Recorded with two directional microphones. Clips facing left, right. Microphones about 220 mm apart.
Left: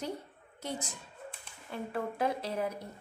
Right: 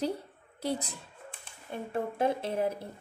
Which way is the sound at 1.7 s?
25° right (ahead or behind).